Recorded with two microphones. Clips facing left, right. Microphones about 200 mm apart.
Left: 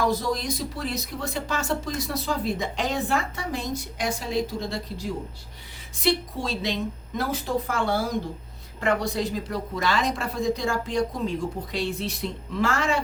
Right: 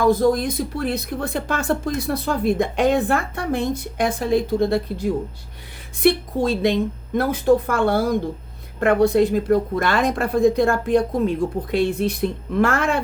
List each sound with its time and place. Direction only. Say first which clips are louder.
0.0 s speech: right 8 dB; 55° right (ahead or behind)